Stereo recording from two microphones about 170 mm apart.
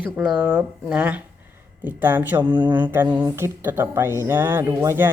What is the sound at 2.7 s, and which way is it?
Speech, 10° right (ahead or behind).